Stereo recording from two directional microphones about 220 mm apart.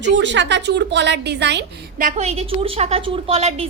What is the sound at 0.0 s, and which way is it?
A woman's voice, 55° right (ahead or behind).